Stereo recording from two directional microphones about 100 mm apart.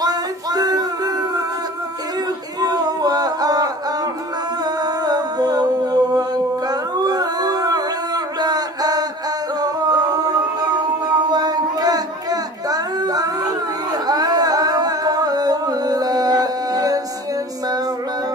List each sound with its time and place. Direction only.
0.0 s music: 40° right (ahead or behind)
2.6 s a sound: 40° right (ahead or behind)
4.6 s humming: 40° right (ahead or behind)
9.6 s music: 40° right (ahead or behind)